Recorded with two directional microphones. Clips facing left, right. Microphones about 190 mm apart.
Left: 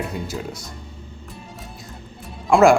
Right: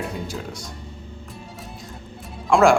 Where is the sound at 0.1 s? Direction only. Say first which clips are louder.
Left 2 dB; centre (ahead or behind).